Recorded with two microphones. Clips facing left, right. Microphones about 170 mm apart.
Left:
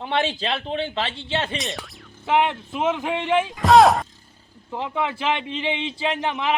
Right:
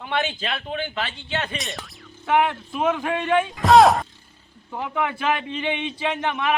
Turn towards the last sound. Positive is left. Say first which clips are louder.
# even
turn(degrees=20)  # may be behind; listen again after turning